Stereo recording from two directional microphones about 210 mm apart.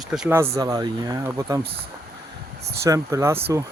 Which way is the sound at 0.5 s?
20° right (ahead or behind).